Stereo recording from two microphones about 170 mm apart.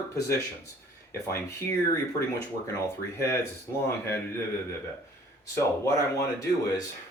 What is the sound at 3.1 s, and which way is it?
Speech, 15° left (ahead or behind).